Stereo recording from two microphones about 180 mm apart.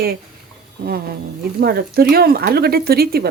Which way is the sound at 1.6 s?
60° right (ahead or behind).